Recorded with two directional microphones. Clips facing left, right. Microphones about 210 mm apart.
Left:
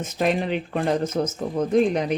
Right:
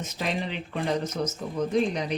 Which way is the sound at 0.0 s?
50° left (ahead or behind).